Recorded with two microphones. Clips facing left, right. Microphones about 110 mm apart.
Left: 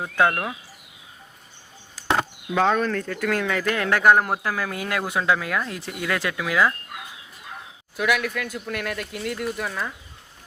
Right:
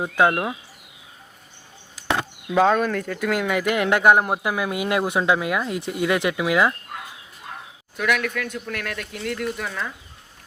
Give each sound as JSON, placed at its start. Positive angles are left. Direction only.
{"t": 0.0, "sound": "speech", "side_deg": -20}
{"t": 2.6, "sound": "speech", "side_deg": -10}
{"t": 7.9, "sound": "speech", "side_deg": 5}